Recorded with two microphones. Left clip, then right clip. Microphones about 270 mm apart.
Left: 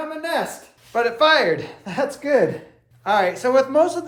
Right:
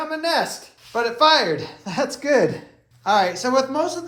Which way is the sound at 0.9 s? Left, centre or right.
Centre.